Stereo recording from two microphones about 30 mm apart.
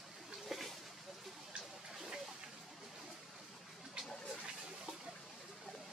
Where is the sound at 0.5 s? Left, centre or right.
Centre.